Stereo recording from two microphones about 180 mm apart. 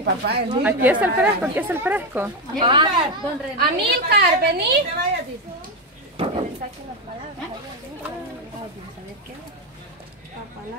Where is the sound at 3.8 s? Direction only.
60° right (ahead or behind).